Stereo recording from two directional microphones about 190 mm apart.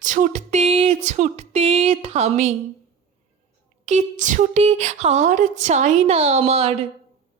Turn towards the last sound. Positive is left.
turn(degrees=-30)  # may be behind; listen again after turning